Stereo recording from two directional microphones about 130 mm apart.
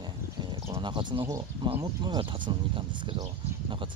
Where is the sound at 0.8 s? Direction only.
35° right (ahead or behind).